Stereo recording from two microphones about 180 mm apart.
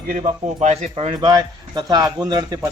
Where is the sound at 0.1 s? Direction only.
40° right (ahead or behind).